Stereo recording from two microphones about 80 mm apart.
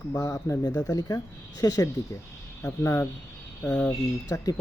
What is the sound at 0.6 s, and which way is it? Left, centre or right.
Speech, left.